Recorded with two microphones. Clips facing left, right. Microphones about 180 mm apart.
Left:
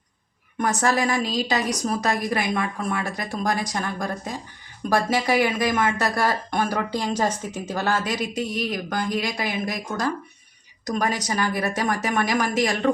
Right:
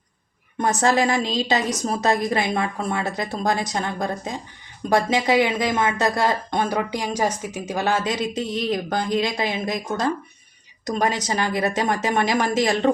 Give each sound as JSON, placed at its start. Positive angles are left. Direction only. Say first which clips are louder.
{"t": 0.6, "sound": "a woman's voice", "louder": "right 3 dB", "side_deg": -20}